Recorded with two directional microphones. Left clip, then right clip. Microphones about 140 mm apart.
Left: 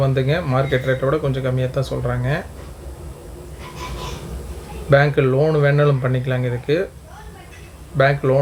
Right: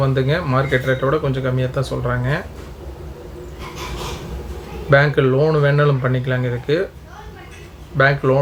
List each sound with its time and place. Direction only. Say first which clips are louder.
0.0 s speech: right 1 dB; 15° left (ahead or behind)
4.9 s speech: right 1 dB; 15° left (ahead or behind)
7.9 s speech: right 1 dB; 15° left (ahead or behind)